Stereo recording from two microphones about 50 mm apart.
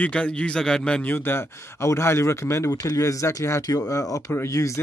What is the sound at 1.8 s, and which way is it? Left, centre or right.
Speech, left.